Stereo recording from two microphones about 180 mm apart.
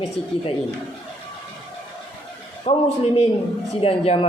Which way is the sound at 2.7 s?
30° left (ahead or behind).